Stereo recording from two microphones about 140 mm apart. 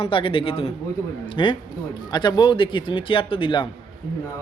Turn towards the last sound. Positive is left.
turn(degrees=35)  # may be behind; listen again after turning